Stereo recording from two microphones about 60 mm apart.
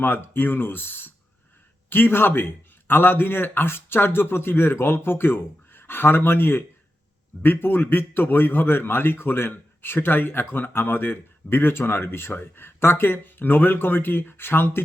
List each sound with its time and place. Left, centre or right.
0.0 s a man's voice: left